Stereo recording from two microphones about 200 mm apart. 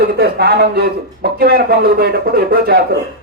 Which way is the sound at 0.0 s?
50° right (ahead or behind).